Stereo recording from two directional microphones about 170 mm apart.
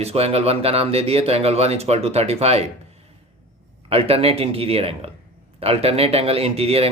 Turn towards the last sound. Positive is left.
turn(degrees=-35)  # may be behind; listen again after turning